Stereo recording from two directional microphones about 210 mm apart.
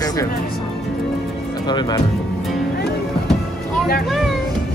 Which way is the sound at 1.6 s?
20° left (ahead or behind).